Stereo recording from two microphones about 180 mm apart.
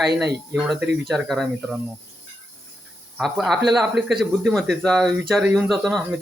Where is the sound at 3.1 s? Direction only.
Centre (ahead or behind).